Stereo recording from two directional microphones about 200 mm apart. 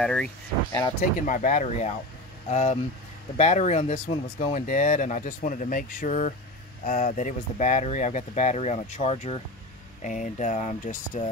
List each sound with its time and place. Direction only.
0.0 s speech: 5° left (ahead or behind)
0.7 s speech: 15° left (ahead or behind)
1.2 s speech: 40° left (ahead or behind)